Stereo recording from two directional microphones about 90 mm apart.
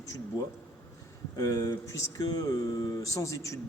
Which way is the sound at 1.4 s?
35° left (ahead or behind).